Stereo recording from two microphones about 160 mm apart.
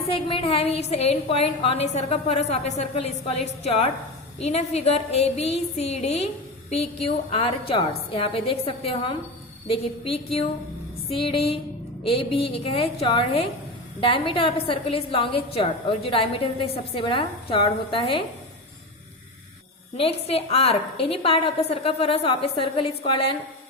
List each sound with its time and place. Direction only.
0.3 s a woman's voice: 35° left (ahead or behind)
20.0 s a woman's voice: 40° left (ahead or behind)